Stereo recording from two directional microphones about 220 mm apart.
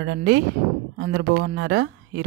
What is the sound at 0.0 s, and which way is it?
Speech, 55° right (ahead or behind).